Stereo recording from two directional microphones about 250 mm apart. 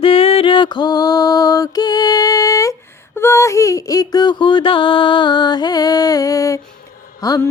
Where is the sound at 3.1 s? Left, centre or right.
Centre.